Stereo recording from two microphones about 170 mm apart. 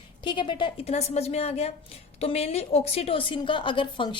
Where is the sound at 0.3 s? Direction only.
30° left (ahead or behind).